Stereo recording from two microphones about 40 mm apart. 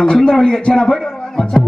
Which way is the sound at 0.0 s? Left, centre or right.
Centre.